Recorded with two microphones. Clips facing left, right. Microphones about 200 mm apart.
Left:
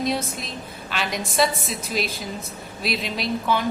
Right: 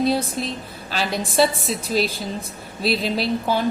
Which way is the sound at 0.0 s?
30° right (ahead or behind).